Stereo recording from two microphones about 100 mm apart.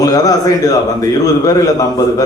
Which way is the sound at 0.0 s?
40° left (ahead or behind).